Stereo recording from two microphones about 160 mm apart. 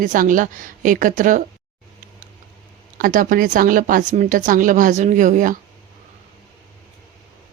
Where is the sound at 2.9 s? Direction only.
60° right (ahead or behind).